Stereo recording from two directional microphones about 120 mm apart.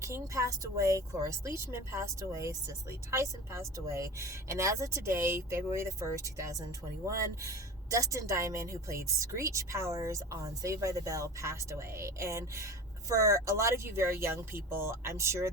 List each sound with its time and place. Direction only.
0.0 s speech: 25° right (ahead or behind)